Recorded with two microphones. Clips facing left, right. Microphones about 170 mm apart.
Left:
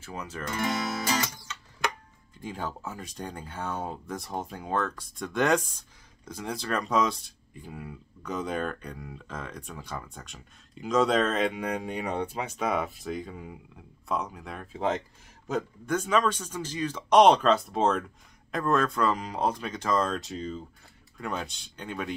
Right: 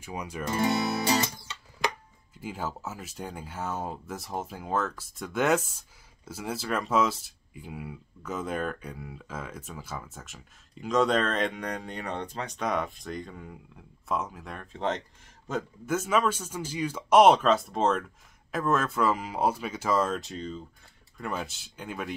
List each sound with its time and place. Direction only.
0.0 s speech: 15° right (ahead or behind)
0.5 s guitar: 30° right (ahead or behind)
2.3 s speech: 5° right (ahead or behind)